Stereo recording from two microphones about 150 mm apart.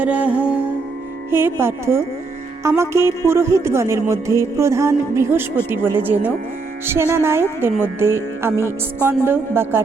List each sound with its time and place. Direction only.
0.0 s music: 10° right (ahead or behind)